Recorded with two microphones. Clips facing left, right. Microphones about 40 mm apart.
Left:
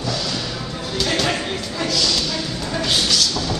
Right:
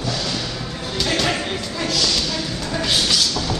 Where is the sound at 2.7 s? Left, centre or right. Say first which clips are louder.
Even; centre.